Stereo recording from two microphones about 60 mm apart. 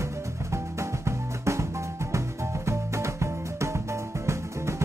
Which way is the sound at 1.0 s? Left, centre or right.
Right.